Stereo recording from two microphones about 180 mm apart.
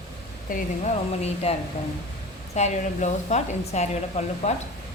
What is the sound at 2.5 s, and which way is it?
A woman's voice, 40° left (ahead or behind).